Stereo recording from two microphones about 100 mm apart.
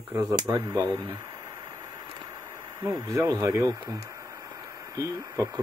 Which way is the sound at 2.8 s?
35° right (ahead or behind).